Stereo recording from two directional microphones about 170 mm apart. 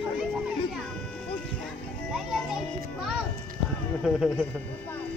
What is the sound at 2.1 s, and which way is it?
Music, centre (ahead or behind).